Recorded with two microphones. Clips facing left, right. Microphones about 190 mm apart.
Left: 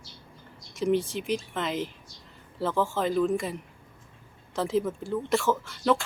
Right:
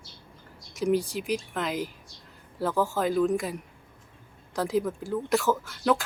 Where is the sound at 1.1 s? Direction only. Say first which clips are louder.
Even; centre (ahead or behind).